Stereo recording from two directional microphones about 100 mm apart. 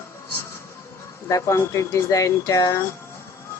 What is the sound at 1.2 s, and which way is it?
Speech, 30° left (ahead or behind).